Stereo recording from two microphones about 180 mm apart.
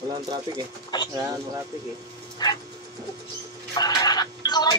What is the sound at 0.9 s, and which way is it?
Speech, 20° left (ahead or behind).